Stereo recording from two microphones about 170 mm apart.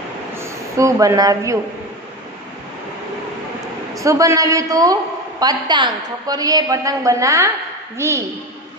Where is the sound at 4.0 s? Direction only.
20° right (ahead or behind).